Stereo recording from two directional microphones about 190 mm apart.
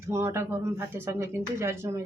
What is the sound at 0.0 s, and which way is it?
Speech, 15° right (ahead or behind).